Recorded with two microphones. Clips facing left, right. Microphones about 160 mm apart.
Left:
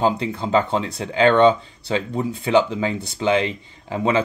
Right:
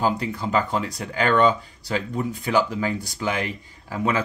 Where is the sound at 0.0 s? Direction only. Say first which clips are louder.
Left 3 dB; 25° left (ahead or behind).